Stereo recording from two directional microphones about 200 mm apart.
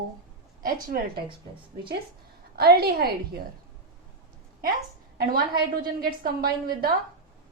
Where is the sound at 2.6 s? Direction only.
50° right (ahead or behind).